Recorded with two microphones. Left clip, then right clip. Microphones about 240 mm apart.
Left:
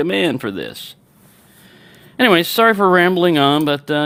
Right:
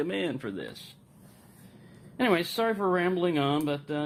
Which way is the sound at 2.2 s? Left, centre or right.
Left.